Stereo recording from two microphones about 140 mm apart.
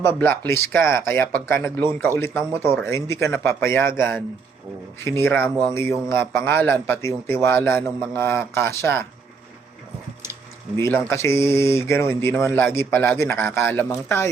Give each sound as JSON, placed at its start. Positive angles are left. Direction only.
{"t": 0.0, "sound": "speech", "side_deg": 15}
{"t": 10.8, "sound": "speech", "side_deg": 20}